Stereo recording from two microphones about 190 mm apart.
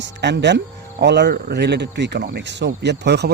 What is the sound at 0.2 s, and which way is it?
Speech, 65° right (ahead or behind).